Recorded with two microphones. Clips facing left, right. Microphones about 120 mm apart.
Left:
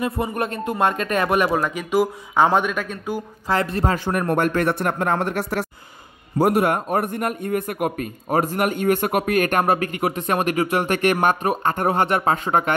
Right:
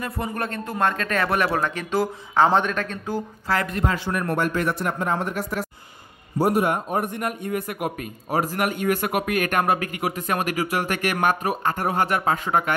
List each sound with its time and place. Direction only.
0.0 s speech: 20° left (ahead or behind)
3.5 s speech: 30° left (ahead or behind)
3.9 s a man's voice: 45° left (ahead or behind)